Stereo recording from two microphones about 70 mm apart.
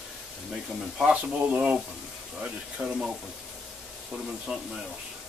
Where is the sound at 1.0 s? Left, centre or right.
Centre.